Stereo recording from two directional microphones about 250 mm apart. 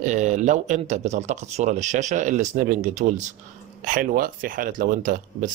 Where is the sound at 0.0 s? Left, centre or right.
Right.